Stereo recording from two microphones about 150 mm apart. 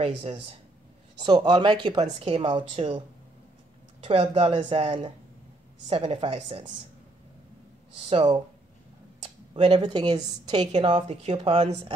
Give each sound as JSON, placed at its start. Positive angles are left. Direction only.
{"t": 0.0, "sound": "speech", "side_deg": -40}
{"t": 1.2, "sound": "speech", "side_deg": -30}
{"t": 2.0, "sound": "a woman's voice", "side_deg": -45}
{"t": 4.0, "sound": "a woman's voice", "side_deg": -40}
{"t": 8.1, "sound": "a woman's voice", "side_deg": -40}
{"t": 9.2, "sound": "a sound", "side_deg": -40}
{"t": 9.8, "sound": "a woman's voice", "side_deg": -30}